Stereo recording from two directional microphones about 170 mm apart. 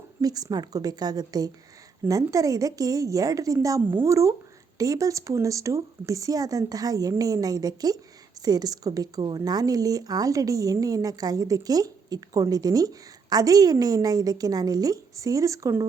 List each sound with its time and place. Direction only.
0.2 s speech: 20° right (ahead or behind)